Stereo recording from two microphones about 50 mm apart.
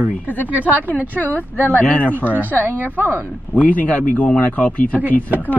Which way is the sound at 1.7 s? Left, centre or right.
Left.